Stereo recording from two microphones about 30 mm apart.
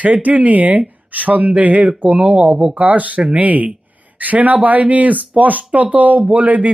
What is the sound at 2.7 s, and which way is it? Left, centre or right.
Speech, right.